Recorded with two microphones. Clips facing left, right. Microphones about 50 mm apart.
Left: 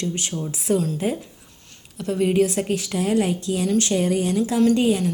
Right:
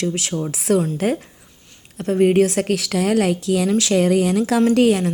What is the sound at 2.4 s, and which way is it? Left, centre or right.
A woman's voice, right.